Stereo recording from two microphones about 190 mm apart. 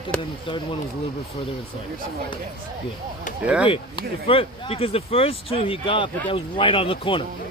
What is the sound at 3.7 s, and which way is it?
Speech, 30° left (ahead or behind).